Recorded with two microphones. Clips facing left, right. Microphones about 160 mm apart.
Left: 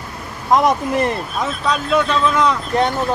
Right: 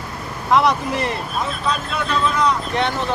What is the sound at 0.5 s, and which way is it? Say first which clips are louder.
Speech: left 2 dB; 45° left (ahead or behind).